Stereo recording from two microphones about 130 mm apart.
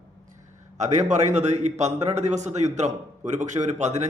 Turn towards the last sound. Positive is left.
turn(degrees=-60)  # may be behind; listen again after turning